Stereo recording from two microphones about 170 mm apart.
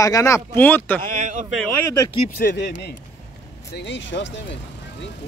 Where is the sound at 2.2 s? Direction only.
60° left (ahead or behind); by 4.6 s 90° left.